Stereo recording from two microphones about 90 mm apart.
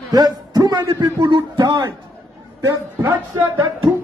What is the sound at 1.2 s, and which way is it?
Speech, 60° right (ahead or behind).